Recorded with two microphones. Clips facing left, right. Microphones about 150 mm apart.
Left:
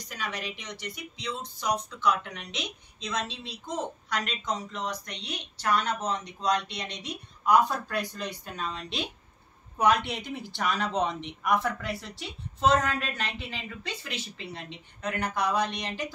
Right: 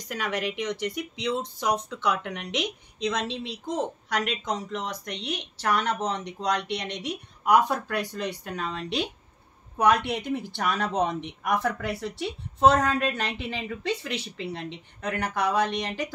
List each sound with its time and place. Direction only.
0.1 s speech: 70° right (ahead or behind)